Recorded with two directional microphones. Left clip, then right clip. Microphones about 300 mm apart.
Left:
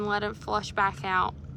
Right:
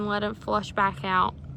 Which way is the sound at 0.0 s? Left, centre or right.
Centre.